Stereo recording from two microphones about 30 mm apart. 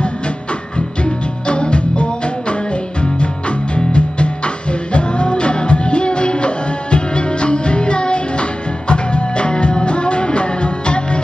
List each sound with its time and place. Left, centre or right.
0.7 s music: left